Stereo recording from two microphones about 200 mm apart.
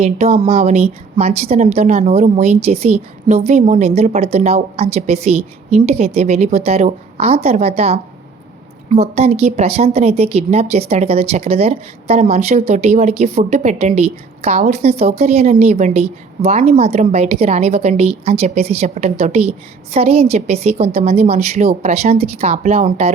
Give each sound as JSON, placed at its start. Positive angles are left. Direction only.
{"t": 0.0, "sound": "a woman's voice", "side_deg": -35}